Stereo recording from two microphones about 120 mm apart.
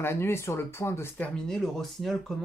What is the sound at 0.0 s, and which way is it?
A man's voice, 20° left (ahead or behind).